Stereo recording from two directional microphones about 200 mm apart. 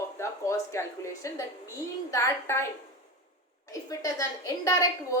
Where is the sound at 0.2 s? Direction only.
15° left (ahead or behind).